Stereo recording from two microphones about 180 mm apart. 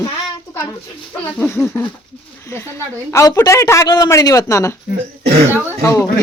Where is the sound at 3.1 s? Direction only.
15° left (ahead or behind).